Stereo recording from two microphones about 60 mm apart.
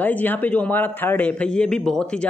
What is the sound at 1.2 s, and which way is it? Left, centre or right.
Speech, centre.